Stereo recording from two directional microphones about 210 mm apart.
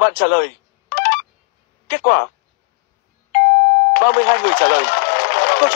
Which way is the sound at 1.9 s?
45° left (ahead or behind).